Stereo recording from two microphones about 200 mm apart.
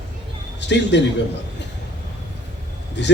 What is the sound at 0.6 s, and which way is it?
Speech, 60° left (ahead or behind).